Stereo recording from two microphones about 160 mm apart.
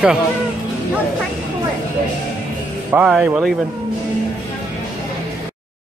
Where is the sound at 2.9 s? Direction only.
5° right (ahead or behind).